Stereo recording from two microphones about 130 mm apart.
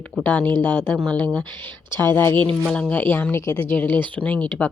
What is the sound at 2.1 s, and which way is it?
Speech, 15° left (ahead or behind).